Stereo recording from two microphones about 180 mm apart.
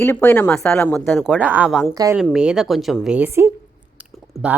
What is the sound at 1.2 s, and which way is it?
Speech, 5° right (ahead or behind).